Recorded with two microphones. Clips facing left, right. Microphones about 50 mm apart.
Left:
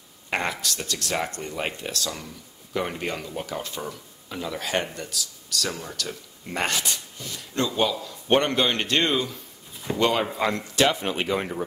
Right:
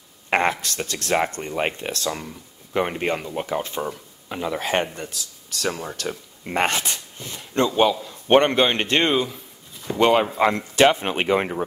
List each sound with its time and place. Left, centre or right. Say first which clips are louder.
0.3 s speech: right 6 dB; right